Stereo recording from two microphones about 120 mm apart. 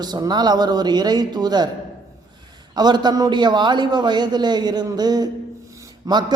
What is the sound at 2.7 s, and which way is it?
A woman's voice, 35° right (ahead or behind).